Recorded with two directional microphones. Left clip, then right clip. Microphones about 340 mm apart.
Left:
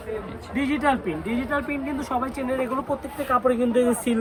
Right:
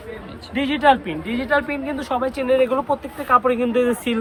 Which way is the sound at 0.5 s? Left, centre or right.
Centre.